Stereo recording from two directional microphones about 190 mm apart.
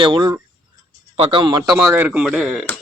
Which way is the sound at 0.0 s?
25° right (ahead or behind).